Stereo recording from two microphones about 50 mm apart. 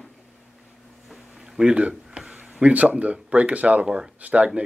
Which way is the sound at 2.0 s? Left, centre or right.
Centre.